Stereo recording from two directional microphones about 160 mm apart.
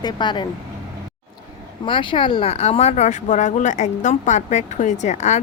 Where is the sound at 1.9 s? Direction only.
30° left (ahead or behind).